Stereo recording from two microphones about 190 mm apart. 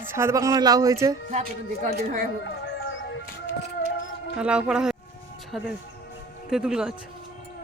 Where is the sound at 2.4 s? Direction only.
70° left (ahead or behind).